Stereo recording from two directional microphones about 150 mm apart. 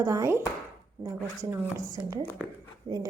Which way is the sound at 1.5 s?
20° right (ahead or behind).